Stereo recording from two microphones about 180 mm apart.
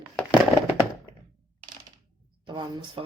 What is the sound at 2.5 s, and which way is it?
Speech, 25° right (ahead or behind).